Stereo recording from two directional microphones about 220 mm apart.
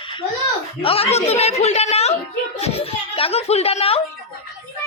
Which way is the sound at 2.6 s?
25° left (ahead or behind).